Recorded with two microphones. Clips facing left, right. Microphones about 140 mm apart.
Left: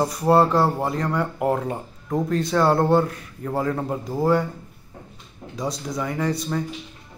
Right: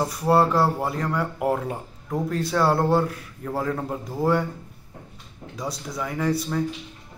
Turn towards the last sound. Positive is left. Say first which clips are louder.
# even
turn(degrees=-5)  # may be behind; listen again after turning